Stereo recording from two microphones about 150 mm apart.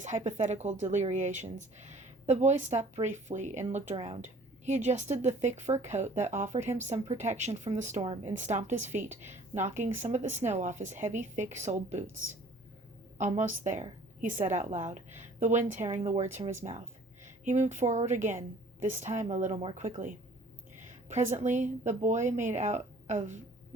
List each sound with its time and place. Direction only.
0.3 s speech: 50° right (ahead or behind)
8.0 s a woman's voice: 40° right (ahead or behind)
8.3 s speech: 55° right (ahead or behind)
13.1 s a woman's voice: 55° right (ahead or behind)
16.2 s speech: 15° right (ahead or behind)
16.5 s a woman's voice: 55° right (ahead or behind)
20.8 s a sound: 55° right (ahead or behind)
21.4 s a woman's voice: 55° right (ahead or behind)